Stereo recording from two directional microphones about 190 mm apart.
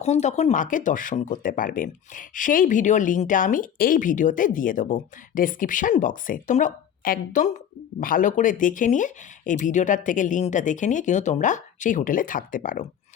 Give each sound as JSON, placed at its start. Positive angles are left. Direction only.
{"t": 0.0, "sound": "speech", "side_deg": 35}